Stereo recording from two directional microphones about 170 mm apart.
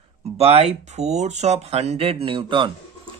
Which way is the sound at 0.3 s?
40° right (ahead or behind).